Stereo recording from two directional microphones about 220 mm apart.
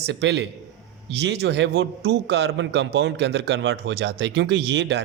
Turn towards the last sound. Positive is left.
turn(degrees=-50)  # may be behind; listen again after turning